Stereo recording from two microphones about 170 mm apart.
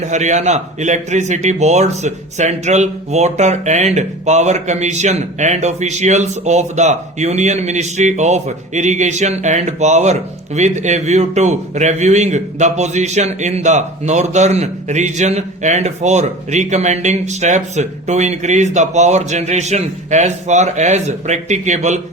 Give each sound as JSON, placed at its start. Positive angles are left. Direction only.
{"t": 0.0, "sound": "a man's voice", "side_deg": -45}